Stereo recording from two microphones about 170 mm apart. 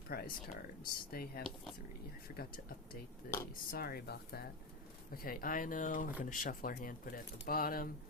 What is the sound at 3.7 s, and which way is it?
Speech, 65° left (ahead or behind).